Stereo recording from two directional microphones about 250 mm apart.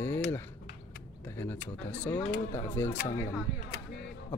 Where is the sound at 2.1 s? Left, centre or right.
Left.